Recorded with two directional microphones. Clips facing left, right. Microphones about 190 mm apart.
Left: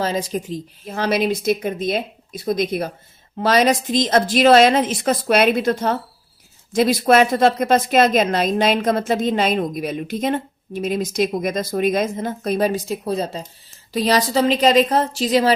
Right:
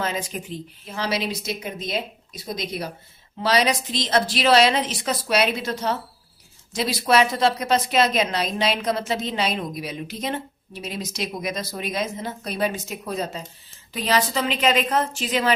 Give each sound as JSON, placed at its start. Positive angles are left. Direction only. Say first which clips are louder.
{"t": 0.0, "sound": "a woman's voice", "louder": "left 6 dB", "side_deg": 35}